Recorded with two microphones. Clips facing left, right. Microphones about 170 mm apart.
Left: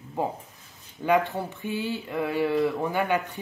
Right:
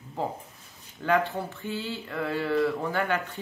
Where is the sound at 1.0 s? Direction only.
15° left (ahead or behind).